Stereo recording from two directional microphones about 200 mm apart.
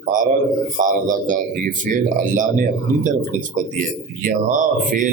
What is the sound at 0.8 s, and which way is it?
Speech, 40° right (ahead or behind).